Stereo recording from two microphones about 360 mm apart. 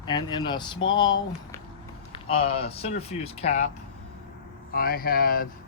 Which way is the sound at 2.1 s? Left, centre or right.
Centre.